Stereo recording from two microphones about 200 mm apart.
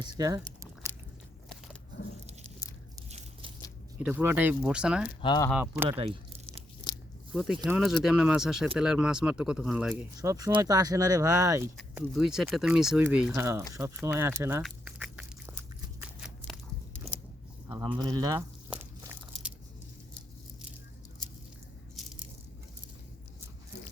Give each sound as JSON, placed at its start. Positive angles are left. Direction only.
{"t": 0.0, "sound": "speech", "side_deg": -20}
{"t": 2.0, "sound": "biting", "side_deg": 65}
{"t": 3.1, "sound": "biting", "side_deg": -35}
{"t": 4.0, "sound": "speech", "side_deg": -10}
{"t": 5.2, "sound": "speech", "side_deg": 20}
{"t": 5.5, "sound": "speech", "side_deg": -5}
{"t": 7.3, "sound": "speech", "side_deg": -5}
{"t": 9.9, "sound": "speech", "side_deg": -15}
{"t": 11.8, "sound": "speech", "side_deg": 0}
{"t": 14.6, "sound": "duck", "side_deg": -5}
{"t": 17.7, "sound": "speech", "side_deg": -25}
{"t": 18.7, "sound": "biting", "side_deg": -10}